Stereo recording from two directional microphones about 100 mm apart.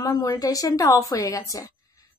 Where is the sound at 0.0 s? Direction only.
35° left (ahead or behind).